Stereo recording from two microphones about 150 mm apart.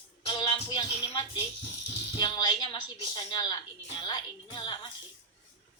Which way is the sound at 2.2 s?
30° left (ahead or behind).